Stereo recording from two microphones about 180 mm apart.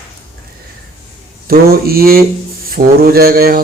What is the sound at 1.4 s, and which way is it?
A man's voice, 55° right (ahead or behind).